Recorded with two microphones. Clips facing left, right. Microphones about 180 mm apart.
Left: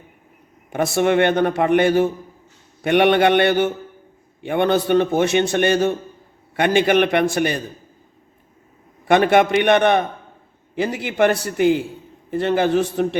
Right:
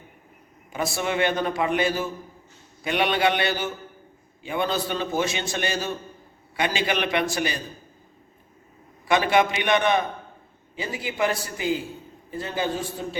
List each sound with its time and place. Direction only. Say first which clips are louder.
0.9 s a man's voice: left 9 dB; 60° left (ahead or behind)
9.0 s a man's voice: left 6 dB; 60° left (ahead or behind)
10.8 s a man's voice: left 8 dB; 70° left (ahead or behind)